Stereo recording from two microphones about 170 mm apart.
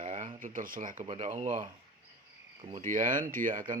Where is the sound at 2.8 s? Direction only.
50° right (ahead or behind).